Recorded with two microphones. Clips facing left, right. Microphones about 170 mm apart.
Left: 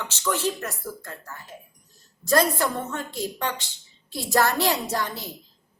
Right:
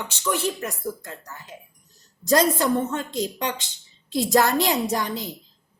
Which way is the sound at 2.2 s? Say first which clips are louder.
Right 2 dB; 20° right (ahead or behind).